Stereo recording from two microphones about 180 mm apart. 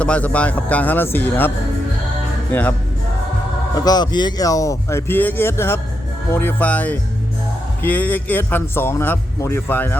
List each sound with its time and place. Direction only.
0.0 s a man's voice: 5° left (ahead or behind)
3.8 s a man's voice: 20° left (ahead or behind)